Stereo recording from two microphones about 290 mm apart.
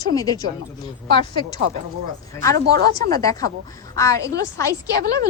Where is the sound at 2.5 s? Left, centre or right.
Right.